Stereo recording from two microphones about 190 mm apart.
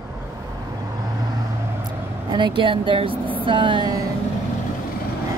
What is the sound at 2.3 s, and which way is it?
Speech, 25° right (ahead or behind).